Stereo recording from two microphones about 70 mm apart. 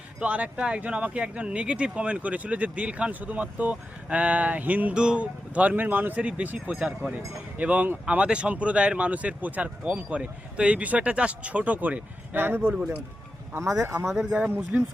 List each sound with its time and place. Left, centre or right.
0.2 s speech: centre
6.1 s speech: centre
12.6 s speech: centre
13.5 s speech: right
14.0 s speech: centre
14.3 s speech: right